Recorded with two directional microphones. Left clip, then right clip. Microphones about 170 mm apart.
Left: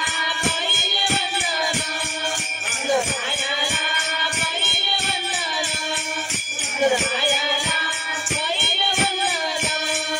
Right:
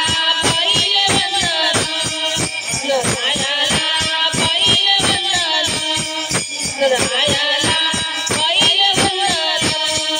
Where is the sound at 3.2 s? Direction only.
25° right (ahead or behind).